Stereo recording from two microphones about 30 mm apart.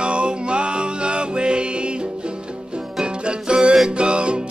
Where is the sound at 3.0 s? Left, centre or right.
Right.